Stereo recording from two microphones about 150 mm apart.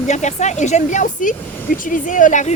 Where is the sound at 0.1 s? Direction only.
50° left (ahead or behind).